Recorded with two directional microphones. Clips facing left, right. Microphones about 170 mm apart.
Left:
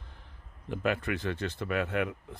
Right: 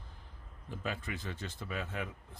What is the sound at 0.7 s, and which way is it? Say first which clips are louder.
Speech: left 9 dB; 70° left (ahead or behind).